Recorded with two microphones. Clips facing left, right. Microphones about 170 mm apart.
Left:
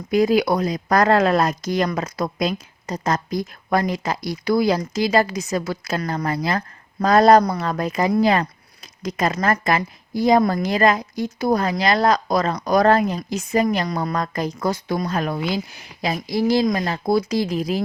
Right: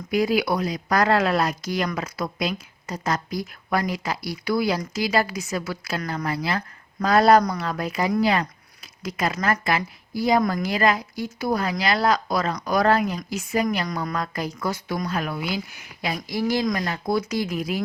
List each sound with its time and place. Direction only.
0.1 s speech: 45° left (ahead or behind)
16.3 s speech: 20° left (ahead or behind); by 17.8 s 35° left (ahead or behind)